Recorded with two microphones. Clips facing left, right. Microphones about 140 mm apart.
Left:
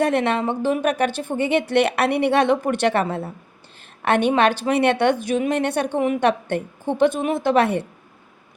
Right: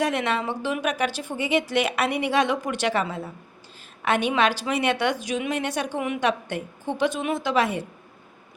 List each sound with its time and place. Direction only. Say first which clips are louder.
0.0 s speech: left 5 dB; 55° left (ahead or behind)